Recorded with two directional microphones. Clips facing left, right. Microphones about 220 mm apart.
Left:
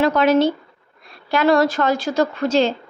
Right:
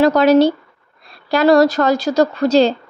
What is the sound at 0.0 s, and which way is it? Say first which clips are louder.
A woman's voice: right 4 dB; 40° right (ahead or behind).